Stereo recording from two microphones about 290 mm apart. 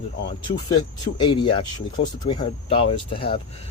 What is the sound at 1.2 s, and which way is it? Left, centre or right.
Speech, centre.